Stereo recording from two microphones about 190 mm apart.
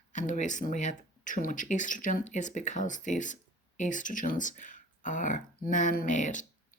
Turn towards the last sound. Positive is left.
turn(degrees=40)  # may be behind; listen again after turning